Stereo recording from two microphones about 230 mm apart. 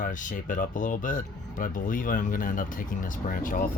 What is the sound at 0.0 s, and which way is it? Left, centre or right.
Speech, left.